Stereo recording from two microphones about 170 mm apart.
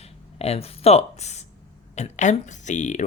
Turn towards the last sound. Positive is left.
turn(degrees=45)  # may be behind; listen again after turning